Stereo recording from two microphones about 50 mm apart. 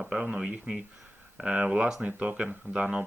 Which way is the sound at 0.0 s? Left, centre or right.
Centre.